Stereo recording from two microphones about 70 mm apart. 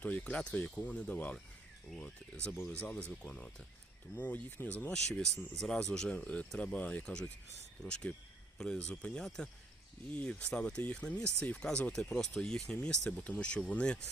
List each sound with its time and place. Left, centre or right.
0.0 s speech: centre
4.1 s speech: left